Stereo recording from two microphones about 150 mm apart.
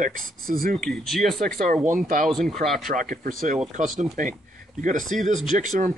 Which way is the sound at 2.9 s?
60° right (ahead or behind).